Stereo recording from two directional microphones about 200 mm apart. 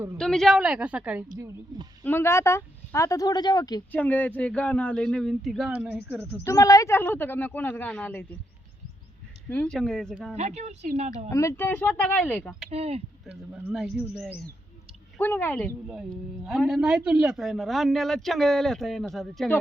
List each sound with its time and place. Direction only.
0.2 s speech: centre (ahead or behind)
1.4 s speech: 20° right (ahead or behind)
2.0 s speech: 10° left (ahead or behind)
3.9 s speech: 10° left (ahead or behind); by 6.4 s 10° right (ahead or behind)
6.4 s speech: 15° left (ahead or behind)
9.5 s speech: 5° left (ahead or behind)
10.3 s a woman's voice: 35° right (ahead or behind)
11.3 s speech: 15° left (ahead or behind)
12.7 s speech: 30° right (ahead or behind)
13.7 s speech: 5° right (ahead or behind)
15.2 s speech: 10° left (ahead or behind)
15.9 s speech: 5° right (ahead or behind)